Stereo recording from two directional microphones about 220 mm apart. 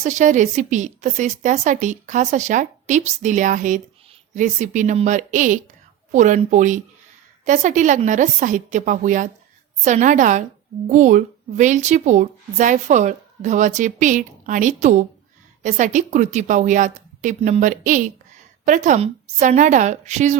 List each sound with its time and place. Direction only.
0.0 s a woman's voice: 35° right (ahead or behind)